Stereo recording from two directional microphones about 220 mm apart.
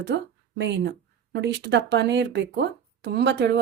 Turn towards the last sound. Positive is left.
turn(degrees=-50)  # may be behind; listen again after turning